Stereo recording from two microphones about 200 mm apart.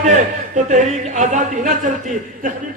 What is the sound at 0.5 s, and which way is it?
A man's voice, 35° right (ahead or behind).